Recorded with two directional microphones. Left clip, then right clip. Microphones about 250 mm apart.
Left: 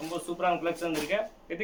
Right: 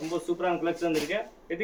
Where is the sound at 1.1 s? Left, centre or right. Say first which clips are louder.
Left 2 dB; left.